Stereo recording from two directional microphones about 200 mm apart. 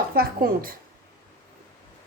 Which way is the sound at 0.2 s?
45° right (ahead or behind).